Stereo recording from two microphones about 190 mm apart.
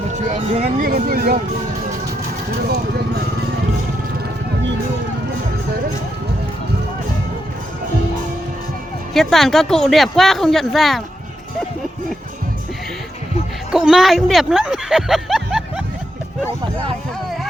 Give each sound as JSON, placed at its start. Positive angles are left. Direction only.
{"t": 0.1, "sound": "speech", "side_deg": -40}
{"t": 0.9, "sound": "speech", "side_deg": -50}
{"t": 9.1, "sound": "speech", "side_deg": 0}
{"t": 13.7, "sound": "speech", "side_deg": -5}